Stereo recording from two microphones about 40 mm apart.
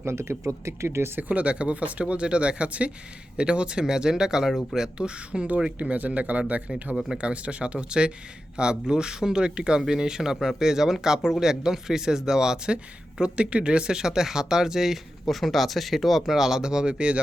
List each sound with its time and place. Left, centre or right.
0.9 s speech: right
1.3 s speech: right; by 4.9 s centre
4.9 s speech: right
5.8 s speech: right; by 12.7 s centre
12.7 s speech: right; by 14.9 s centre
15.3 s speech: centre; by 17.2 s right